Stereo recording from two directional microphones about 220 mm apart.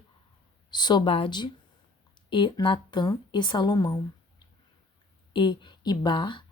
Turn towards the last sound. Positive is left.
turn(degrees=20)  # may be behind; listen again after turning